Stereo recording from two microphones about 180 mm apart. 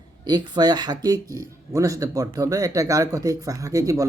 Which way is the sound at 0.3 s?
25° right (ahead or behind).